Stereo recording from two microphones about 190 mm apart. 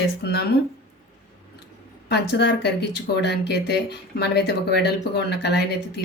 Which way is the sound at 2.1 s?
60° left (ahead or behind).